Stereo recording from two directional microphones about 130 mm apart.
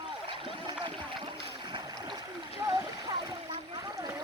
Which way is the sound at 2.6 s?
30° right (ahead or behind).